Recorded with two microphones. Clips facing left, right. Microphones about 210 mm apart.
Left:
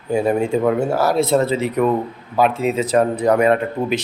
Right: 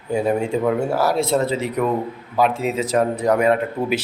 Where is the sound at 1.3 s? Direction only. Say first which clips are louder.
Left 3 dB; 55° left (ahead or behind).